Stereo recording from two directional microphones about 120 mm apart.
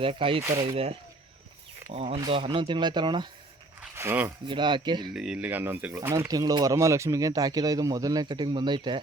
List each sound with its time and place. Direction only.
0.0 s speech: 50° right (ahead or behind)
1.9 s speech: 55° right (ahead or behind)
2.3 s speech: 45° right (ahead or behind)
3.9 s speech: 20° right (ahead or behind)
4.4 s speech: 40° right (ahead or behind)
5.1 s speech: 5° right (ahead or behind); by 9.0 s 40° right (ahead or behind)